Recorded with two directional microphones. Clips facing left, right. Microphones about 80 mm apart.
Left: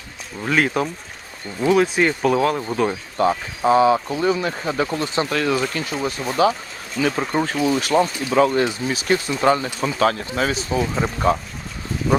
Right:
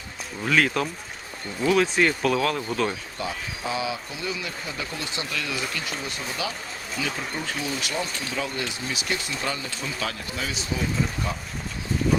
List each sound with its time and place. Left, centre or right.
0.4 s speech: centre
3.2 s speech: left